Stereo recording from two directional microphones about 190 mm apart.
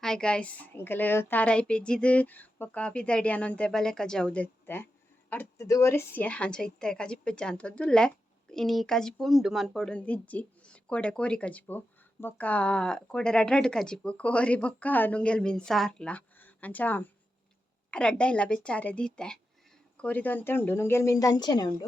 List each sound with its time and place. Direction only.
0.0 s a woman's voice: 5° left (ahead or behind); by 21.8 s 20° left (ahead or behind)